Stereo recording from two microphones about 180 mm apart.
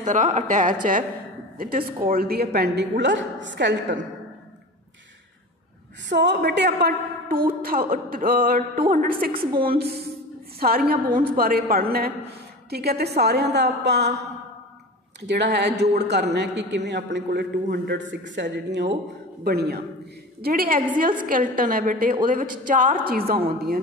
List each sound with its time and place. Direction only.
0.0 s a woman's voice: 45° right (ahead or behind); by 4.0 s 80° right
6.0 s a woman's voice: 75° right (ahead or behind)
15.2 s a man's voice: 70° right (ahead or behind)
19.4 s a woman's voice: 60° right (ahead or behind)